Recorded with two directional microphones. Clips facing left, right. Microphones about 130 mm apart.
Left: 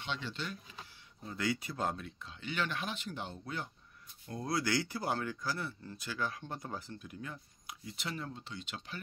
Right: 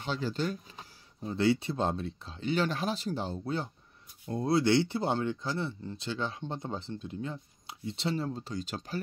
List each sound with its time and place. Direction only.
0.0 s speech: 40° right (ahead or behind)
1.2 s speech: 30° right (ahead or behind)